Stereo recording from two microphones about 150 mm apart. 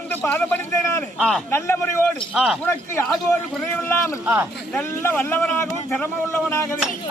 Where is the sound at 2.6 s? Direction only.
15° left (ahead or behind).